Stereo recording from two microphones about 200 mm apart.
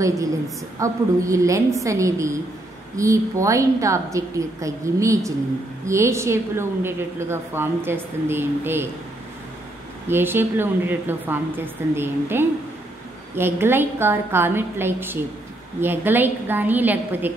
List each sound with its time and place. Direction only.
0.7 s a woman's voice: 15° right (ahead or behind)
10.0 s a woman's voice: 10° right (ahead or behind)